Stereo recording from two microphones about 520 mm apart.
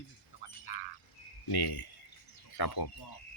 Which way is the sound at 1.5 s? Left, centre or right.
Left.